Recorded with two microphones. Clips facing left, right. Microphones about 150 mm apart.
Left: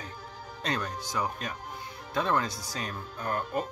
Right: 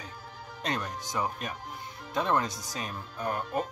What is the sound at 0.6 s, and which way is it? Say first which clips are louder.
Speech: left 1 dB; 20° right (ahead or behind).